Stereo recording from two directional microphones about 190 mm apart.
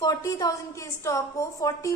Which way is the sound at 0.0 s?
20° left (ahead or behind).